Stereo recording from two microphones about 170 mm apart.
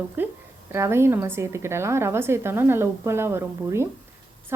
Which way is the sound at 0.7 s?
15° right (ahead or behind).